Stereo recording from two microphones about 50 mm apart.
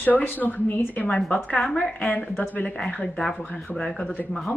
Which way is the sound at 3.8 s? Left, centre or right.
Centre.